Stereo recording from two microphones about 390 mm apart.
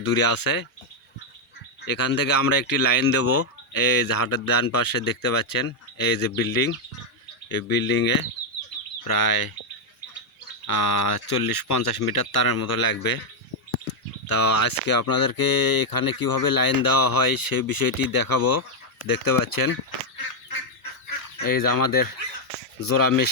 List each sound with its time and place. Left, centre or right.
0.0 s speech: left
1.9 s speech: left
3.2 s speech: left
3.7 s speech: left
10.8 s speech: left
14.3 s speech: left
21.3 s speech: left